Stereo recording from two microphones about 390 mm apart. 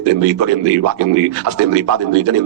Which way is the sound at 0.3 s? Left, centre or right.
Right.